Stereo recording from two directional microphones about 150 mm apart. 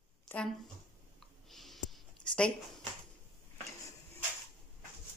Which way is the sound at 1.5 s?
Centre (ahead or behind).